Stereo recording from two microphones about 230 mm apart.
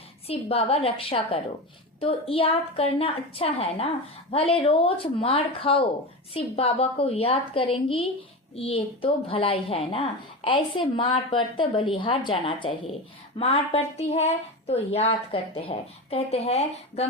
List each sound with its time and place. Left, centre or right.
0.3 s a woman's voice: left